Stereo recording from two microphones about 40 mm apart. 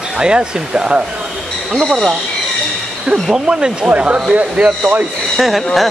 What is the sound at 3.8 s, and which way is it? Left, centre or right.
Speech, right.